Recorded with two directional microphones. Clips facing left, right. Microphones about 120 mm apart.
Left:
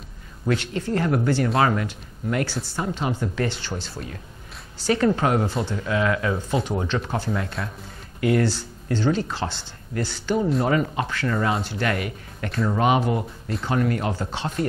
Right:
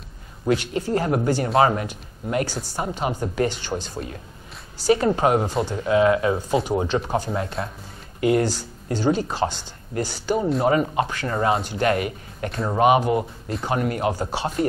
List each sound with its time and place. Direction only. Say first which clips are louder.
0.6 s a woman's voice: right 2 dB; 15° right (ahead or behind)
6.3 s speech: right 3 dB; 10° right (ahead or behind)
7.3 s speech: right 2 dB; 30° right (ahead or behind)
10.6 s speech: right 3 dB; 25° right (ahead or behind)